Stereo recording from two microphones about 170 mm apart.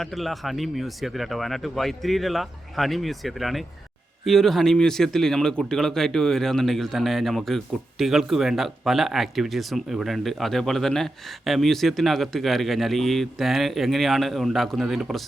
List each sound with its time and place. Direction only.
0.0 s speech: centre (ahead or behind)